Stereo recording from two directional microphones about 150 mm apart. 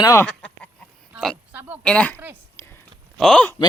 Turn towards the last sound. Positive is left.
turn(degrees=5)  # may be behind; listen again after turning